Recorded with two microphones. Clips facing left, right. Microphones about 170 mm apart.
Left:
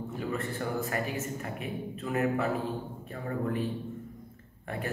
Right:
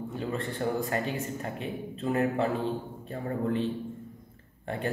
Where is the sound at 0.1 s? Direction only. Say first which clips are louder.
Even; 30° right (ahead or behind).